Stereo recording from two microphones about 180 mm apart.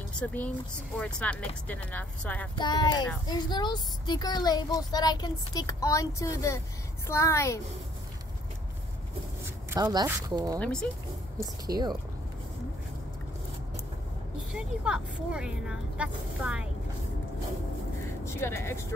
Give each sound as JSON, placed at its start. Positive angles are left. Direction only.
{"t": 0.1, "sound": "speech", "side_deg": 5}
{"t": 2.5, "sound": "speech", "side_deg": 25}
{"t": 9.7, "sound": "speech", "side_deg": -20}
{"t": 10.6, "sound": "speech", "side_deg": 5}
{"t": 11.3, "sound": "speech", "side_deg": -20}
{"t": 14.5, "sound": "speech", "side_deg": -5}
{"t": 18.2, "sound": "speech", "side_deg": 15}